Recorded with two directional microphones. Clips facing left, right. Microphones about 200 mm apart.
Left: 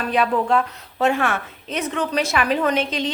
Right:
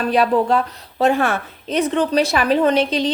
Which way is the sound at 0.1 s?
35° right (ahead or behind).